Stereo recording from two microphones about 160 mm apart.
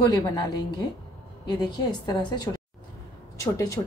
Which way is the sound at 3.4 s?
20° left (ahead or behind).